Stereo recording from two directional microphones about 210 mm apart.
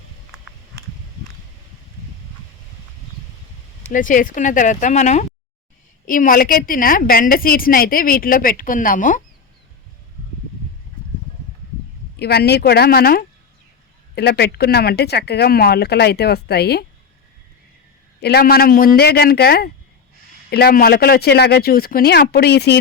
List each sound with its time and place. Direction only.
3.8 s a woman's voice: 40° left (ahead or behind)
12.1 s a woman's voice: 50° left (ahead or behind)
18.2 s a woman's voice: 50° left (ahead or behind)